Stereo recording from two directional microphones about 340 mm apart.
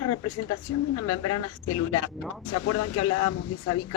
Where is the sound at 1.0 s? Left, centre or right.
Left.